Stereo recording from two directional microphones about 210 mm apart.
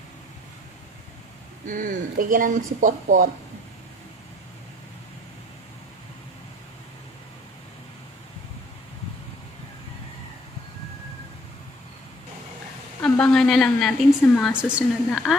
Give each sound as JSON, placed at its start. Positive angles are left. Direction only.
{"t": 1.7, "sound": "speech", "side_deg": -40}
{"t": 13.0, "sound": "a woman's voice", "side_deg": 5}